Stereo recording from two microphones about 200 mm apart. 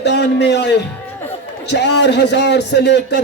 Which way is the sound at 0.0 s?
60° left (ahead or behind).